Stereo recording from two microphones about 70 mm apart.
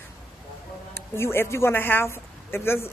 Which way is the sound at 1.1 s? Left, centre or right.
Left.